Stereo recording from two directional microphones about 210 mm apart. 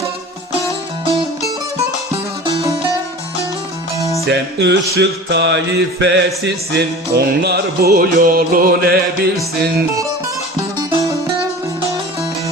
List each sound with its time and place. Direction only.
4.3 s music: 55° right (ahead or behind)